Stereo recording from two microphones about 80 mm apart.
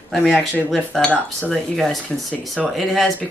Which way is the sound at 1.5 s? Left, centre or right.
Centre.